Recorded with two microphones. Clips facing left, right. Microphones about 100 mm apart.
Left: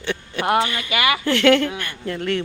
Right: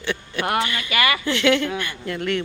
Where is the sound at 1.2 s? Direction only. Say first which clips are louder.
Left 7 dB; 45° left (ahead or behind).